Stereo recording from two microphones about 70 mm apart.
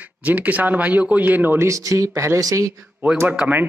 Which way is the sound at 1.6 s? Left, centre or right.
Right.